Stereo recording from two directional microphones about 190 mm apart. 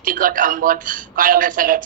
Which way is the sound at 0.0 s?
45° right (ahead or behind).